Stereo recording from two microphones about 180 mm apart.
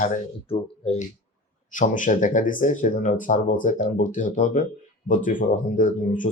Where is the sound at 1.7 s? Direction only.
45° left (ahead or behind).